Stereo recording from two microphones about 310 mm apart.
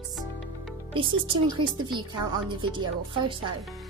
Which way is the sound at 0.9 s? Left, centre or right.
Centre.